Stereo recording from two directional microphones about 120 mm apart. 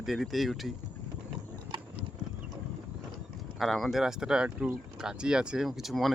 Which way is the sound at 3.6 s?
Centre (ahead or behind).